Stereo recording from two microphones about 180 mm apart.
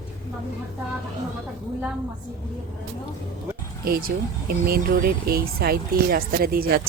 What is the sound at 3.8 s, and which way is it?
Speech, 55° right (ahead or behind).